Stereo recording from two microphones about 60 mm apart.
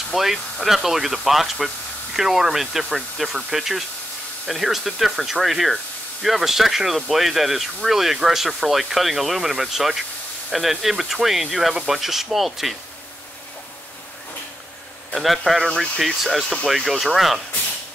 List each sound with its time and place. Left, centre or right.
0.1 s speech: centre
15.1 s speech: centre